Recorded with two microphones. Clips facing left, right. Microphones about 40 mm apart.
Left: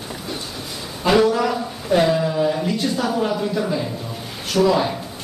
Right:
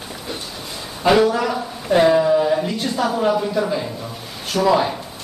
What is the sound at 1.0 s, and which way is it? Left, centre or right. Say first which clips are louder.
A man's voice: right 1 dB; centre.